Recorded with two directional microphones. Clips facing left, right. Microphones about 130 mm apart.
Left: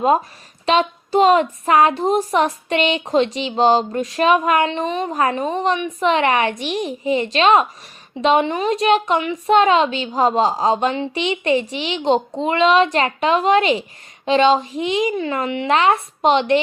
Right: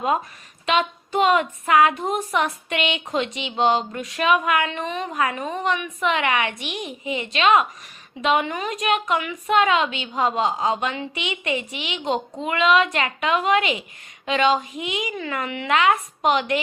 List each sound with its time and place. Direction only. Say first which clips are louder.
0.0 s speech: left 6 dB; 35° left (ahead or behind)